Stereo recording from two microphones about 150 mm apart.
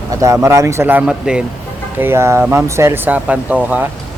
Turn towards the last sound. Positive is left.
turn(degrees=-10)  # may be behind; listen again after turning